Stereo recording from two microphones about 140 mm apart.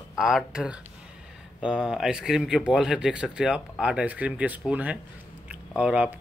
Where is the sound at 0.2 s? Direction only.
5° right (ahead or behind).